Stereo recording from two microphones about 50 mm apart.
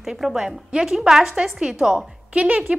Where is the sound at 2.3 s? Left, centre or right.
Right.